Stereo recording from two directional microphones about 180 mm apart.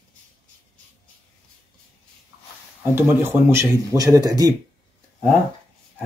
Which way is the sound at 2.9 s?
15° right (ahead or behind).